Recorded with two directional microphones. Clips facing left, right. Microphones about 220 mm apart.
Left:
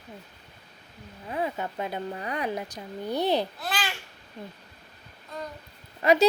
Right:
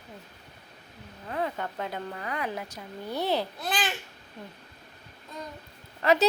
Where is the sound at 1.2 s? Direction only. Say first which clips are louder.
Left 1 dB; 10° left (ahead or behind).